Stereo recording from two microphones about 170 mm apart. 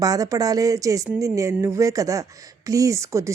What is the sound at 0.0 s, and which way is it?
Speech, 20° right (ahead or behind).